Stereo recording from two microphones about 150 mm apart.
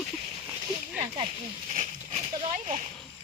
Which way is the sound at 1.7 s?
50° right (ahead or behind).